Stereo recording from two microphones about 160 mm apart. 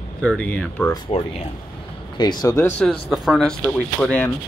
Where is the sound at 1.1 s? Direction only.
35° left (ahead or behind); by 2.7 s 20° left (ahead or behind).